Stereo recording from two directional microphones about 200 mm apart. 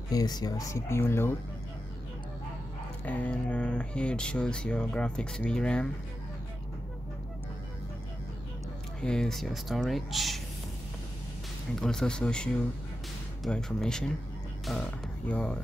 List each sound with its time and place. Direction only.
0.1 s speech: 20° left (ahead or behind)
3.1 s speech: 5° left (ahead or behind)
9.0 s speech: 5° left (ahead or behind)
11.7 s speech: centre (ahead or behind)